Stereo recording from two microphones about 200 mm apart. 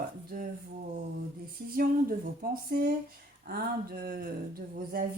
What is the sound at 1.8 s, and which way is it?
Speech, 45° right (ahead or behind).